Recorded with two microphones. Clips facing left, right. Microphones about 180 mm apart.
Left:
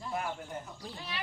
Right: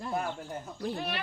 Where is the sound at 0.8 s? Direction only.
60° right (ahead or behind).